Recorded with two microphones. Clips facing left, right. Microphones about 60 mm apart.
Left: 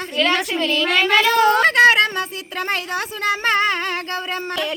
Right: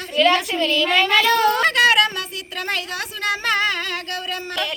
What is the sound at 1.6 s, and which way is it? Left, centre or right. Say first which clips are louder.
A woman's voice: left 3 dB; left.